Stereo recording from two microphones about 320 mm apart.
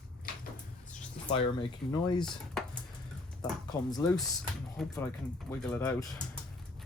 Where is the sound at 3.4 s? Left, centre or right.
Centre.